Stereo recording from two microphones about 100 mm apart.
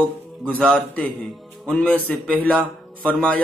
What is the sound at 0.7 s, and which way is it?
A man's voice, 15° left (ahead or behind).